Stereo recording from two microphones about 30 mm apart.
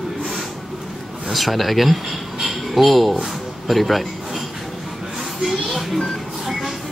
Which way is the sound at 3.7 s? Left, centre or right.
Centre.